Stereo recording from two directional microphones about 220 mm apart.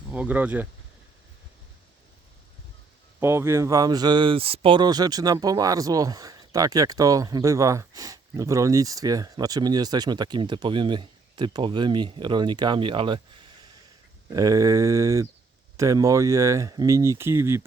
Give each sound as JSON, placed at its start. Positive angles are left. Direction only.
{"t": 0.1, "sound": "speech", "side_deg": -5}
{"t": 3.2, "sound": "speech", "side_deg": -10}